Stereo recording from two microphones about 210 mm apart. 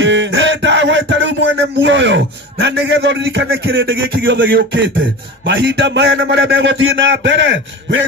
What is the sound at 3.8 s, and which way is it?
A man's voice, 60° right (ahead or behind).